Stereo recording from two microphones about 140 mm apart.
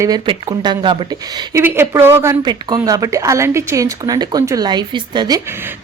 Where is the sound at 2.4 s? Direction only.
30° right (ahead or behind).